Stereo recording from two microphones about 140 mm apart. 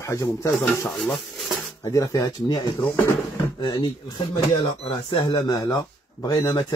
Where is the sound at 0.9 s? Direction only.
Centre (ahead or behind).